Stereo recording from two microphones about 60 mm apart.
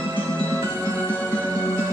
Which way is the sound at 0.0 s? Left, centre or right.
Left.